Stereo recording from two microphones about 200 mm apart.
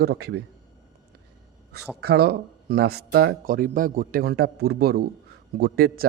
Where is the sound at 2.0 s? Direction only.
50° right (ahead or behind).